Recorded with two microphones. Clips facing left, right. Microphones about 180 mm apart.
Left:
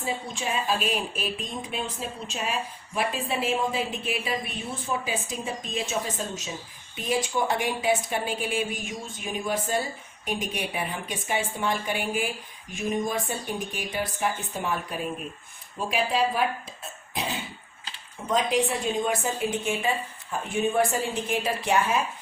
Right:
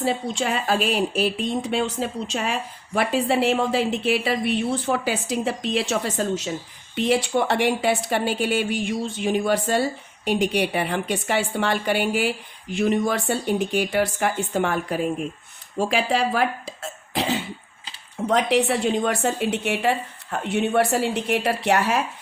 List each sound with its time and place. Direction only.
0.0 s a woman's voice: 75° right (ahead or behind)